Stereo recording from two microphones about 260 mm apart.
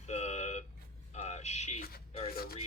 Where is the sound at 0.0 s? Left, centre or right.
Left.